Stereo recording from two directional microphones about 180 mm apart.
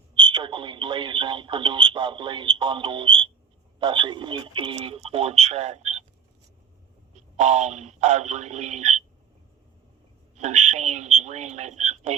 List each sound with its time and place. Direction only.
0.2 s speech: 25° right (ahead or behind)
7.3 s speech: 40° right (ahead or behind)
10.3 s speech: 40° right (ahead or behind)